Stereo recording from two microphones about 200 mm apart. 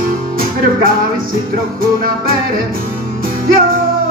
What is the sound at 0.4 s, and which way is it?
Music, 45° right (ahead or behind).